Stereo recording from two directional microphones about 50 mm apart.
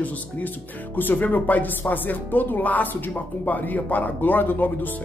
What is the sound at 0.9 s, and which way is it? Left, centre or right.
Speech, left.